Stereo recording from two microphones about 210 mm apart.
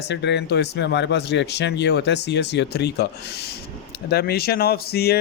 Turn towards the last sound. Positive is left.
turn(degrees=50)  # may be behind; listen again after turning